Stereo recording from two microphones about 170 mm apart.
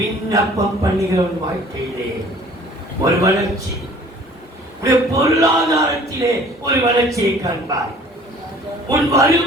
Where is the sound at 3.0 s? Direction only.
20° right (ahead or behind).